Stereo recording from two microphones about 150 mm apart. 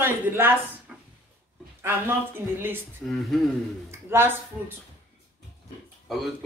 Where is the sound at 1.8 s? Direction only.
15° right (ahead or behind).